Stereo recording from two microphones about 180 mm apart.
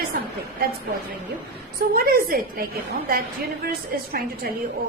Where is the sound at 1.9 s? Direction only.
55° right (ahead or behind).